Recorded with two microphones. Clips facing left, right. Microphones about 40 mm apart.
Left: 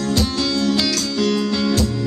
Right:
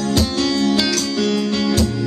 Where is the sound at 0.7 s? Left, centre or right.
Right.